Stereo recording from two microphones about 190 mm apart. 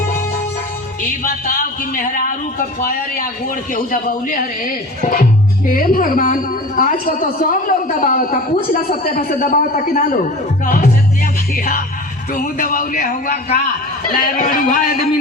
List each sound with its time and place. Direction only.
1.2 s speech: 45° left (ahead or behind)
3.7 s speech: 45° left (ahead or behind)